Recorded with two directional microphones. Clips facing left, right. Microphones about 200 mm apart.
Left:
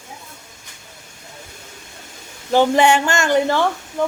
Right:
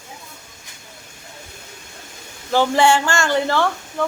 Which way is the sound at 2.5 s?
20° left (ahead or behind).